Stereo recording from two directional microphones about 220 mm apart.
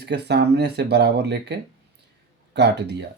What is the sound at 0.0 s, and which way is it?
Speech, 50° right (ahead or behind).